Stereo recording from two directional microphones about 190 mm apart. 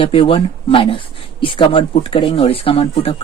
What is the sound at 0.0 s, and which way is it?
Speech, 30° left (ahead or behind).